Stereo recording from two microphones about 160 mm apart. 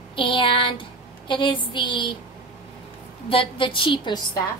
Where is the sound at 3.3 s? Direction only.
35° left (ahead or behind).